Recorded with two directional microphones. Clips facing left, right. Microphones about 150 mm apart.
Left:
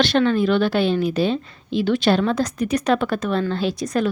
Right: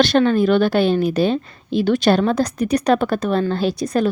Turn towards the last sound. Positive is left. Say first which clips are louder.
# right 3 dB
turn(degrees=-35)  # may be behind; listen again after turning